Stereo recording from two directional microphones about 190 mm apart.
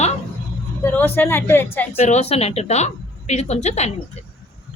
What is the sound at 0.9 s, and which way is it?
Speech, 10° left (ahead or behind).